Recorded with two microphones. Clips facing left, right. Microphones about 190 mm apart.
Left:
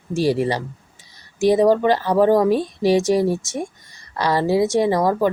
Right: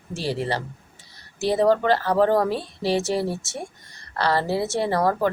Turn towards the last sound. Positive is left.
turn(degrees=15)  # may be behind; listen again after turning